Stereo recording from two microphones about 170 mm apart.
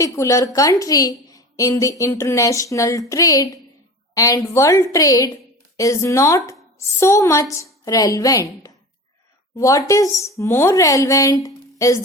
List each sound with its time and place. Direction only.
0.0 s a woman's voice: 20° left (ahead or behind)